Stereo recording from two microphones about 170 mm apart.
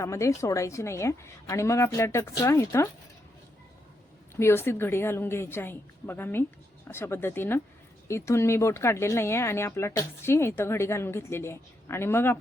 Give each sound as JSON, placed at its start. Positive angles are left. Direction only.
{"t": 0.0, "sound": "speech", "side_deg": 15}
{"t": 4.4, "sound": "speech", "side_deg": 15}